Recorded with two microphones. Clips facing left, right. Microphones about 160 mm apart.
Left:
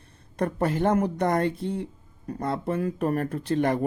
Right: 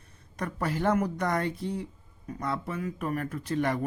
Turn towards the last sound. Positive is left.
turn(degrees=25)  # may be behind; listen again after turning